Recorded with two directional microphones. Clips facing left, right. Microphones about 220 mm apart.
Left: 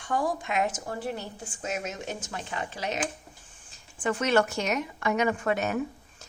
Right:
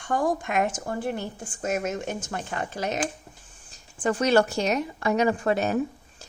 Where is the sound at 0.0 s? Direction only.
50° right (ahead or behind).